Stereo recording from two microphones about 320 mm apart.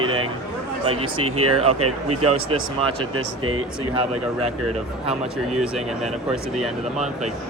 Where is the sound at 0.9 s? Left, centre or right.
Right.